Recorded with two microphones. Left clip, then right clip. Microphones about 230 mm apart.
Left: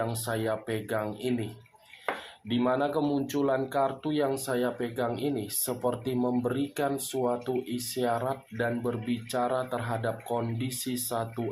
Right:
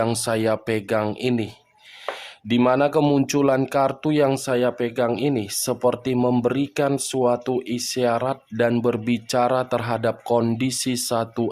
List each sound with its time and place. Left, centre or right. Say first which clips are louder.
0.0 s speech: right 9 dB; right
2.5 s speech: right 9 dB; right